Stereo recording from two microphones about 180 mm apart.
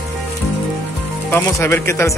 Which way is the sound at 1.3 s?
15° left (ahead or behind).